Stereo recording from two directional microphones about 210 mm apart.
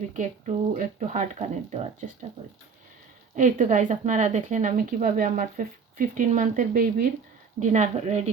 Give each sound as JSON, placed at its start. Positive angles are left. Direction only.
{"t": 0.1, "sound": "speech", "side_deg": -35}